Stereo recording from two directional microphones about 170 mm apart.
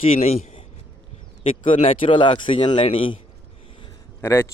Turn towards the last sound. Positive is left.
turn(degrees=15)  # may be behind; listen again after turning